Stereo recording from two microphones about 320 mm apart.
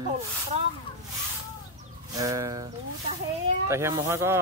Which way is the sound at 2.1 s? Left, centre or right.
Centre.